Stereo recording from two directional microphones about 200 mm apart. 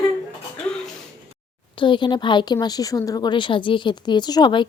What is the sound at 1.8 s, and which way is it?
A woman's voice, 25° left (ahead or behind).